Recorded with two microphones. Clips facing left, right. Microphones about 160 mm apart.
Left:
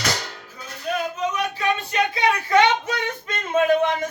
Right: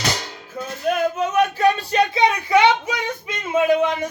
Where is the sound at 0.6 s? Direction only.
55° right (ahead or behind).